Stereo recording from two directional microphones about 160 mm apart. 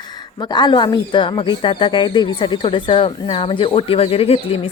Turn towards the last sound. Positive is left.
turn(degrees=35)  # may be behind; listen again after turning